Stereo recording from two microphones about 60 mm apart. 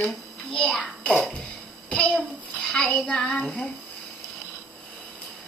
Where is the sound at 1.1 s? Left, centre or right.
Centre.